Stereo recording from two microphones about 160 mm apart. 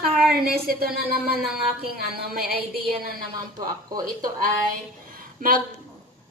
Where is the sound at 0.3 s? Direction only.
75° right (ahead or behind).